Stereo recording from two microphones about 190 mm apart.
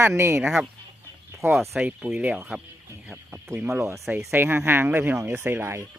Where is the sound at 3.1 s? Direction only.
10° right (ahead or behind).